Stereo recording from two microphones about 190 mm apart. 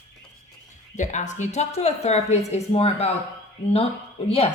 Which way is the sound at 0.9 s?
40° left (ahead or behind).